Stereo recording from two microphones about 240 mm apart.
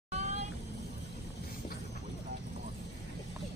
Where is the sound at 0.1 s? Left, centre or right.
Right.